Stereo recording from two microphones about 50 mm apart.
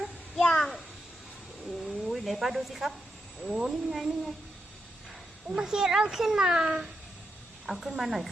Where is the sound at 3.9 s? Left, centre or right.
Centre.